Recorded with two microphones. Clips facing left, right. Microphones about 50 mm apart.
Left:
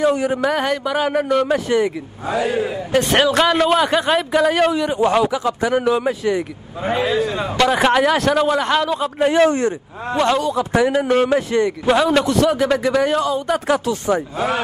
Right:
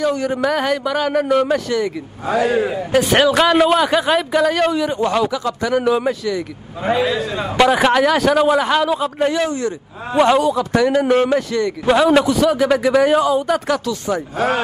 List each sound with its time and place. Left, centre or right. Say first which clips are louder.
0.0 s speech: left 1 dB; centre
1.2 s a man's voice: right 2 dB; centre
2.2 s a man's voice: right 3 dB; right
2.9 s a man's voice: right 1 dB; centre
5.9 s a man's voice: right 3 dB; centre
7.5 s a man's voice: right 2 dB; centre
9.3 s speech: left 5 dB; left
10.1 s a man's voice: right 4 dB; centre
10.5 s a man's voice: right 1 dB; centre
11.3 s speech: left 1 dB; centre
11.8 s a man's voice: right 5 dB; centre
13.8 s speech: left 2 dB; left
14.3 s a man's voice: right 2 dB; right